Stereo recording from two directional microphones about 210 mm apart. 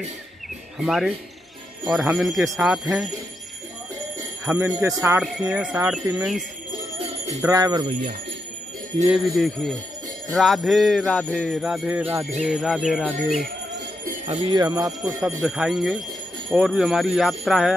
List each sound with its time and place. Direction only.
0.7 s music: centre (ahead or behind)
4.5 s speech: 10° right (ahead or behind)
5.5 s music: 5° right (ahead or behind)
7.4 s speech: 20° right (ahead or behind)
9.1 s music: centre (ahead or behind)
14.2 s speech: 25° right (ahead or behind)
15.4 s music: 5° right (ahead or behind)